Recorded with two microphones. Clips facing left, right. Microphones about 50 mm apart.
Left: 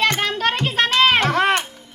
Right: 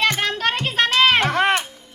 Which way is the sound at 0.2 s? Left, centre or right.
Centre.